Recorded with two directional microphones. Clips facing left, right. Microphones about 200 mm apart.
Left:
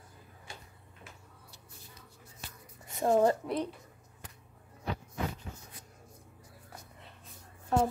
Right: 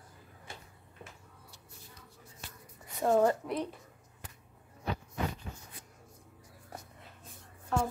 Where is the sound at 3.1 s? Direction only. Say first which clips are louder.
Left 1 dB; 25° left (ahead or behind).